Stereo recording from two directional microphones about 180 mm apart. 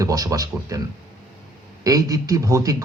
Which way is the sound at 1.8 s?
20° right (ahead or behind).